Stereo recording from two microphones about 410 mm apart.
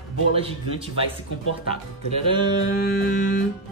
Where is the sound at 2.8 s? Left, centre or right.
Left.